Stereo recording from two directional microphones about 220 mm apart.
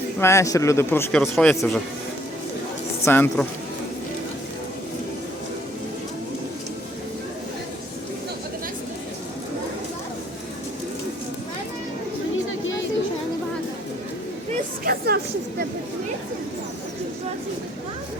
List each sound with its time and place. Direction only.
0.2 s a man's voice: 15° left (ahead or behind)
3.0 s speech: 10° left (ahead or behind)
14.5 s a sound: 45° right (ahead or behind)